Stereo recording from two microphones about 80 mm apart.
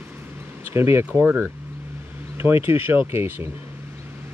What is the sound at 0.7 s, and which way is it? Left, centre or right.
Speech, right.